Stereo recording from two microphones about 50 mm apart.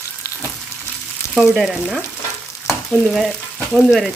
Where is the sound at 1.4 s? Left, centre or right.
Centre.